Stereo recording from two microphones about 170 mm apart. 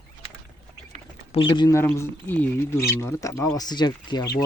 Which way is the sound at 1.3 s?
30° left (ahead or behind).